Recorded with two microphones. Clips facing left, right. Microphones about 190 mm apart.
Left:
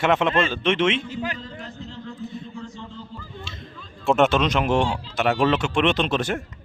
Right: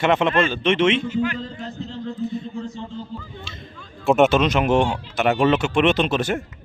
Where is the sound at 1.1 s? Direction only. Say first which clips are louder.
Right 7 dB; 35° left (ahead or behind).